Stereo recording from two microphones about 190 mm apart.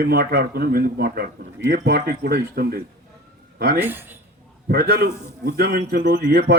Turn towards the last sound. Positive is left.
turn(degrees=-55)  # may be behind; listen again after turning